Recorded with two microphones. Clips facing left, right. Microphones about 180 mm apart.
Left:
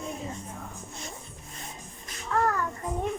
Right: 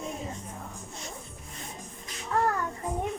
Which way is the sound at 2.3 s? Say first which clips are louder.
Left 1 dB; 25° right (ahead or behind).